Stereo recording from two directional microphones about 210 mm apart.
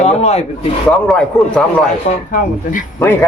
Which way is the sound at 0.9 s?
5° left (ahead or behind).